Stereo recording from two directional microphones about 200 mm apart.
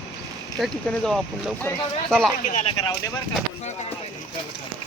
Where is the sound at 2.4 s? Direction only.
35° left (ahead or behind).